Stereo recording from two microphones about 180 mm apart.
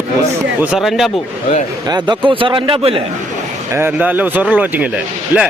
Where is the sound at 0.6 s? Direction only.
5° right (ahead or behind).